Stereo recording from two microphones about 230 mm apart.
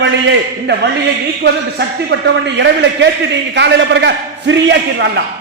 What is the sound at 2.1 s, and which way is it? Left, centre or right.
A man's voice, right.